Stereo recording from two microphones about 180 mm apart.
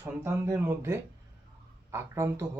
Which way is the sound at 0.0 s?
10° right (ahead or behind).